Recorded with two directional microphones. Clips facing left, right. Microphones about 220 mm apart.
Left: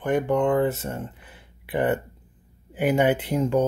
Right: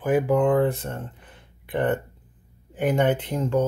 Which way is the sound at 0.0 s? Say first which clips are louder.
Right 2 dB; 5° right (ahead or behind).